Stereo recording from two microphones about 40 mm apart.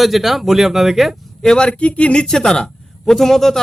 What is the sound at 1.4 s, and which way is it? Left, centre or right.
Speech, centre.